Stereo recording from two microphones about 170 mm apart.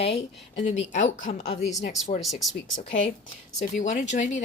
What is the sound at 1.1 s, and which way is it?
Speech, 45° left (ahead or behind).